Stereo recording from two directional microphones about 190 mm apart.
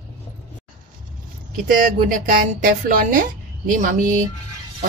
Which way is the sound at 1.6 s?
50° right (ahead or behind).